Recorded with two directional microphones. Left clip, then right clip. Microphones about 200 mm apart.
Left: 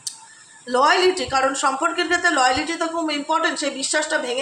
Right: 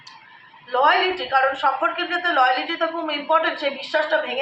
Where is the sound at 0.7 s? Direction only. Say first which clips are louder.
Left 1 dB; 60° left (ahead or behind).